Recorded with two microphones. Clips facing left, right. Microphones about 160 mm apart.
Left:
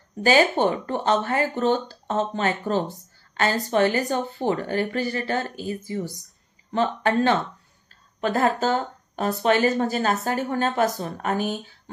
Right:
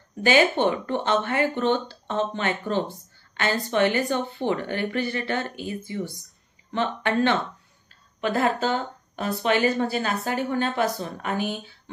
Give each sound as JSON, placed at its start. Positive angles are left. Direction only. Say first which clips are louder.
{"t": 0.2, "sound": "speech", "louder": "left 1 dB", "side_deg": 40}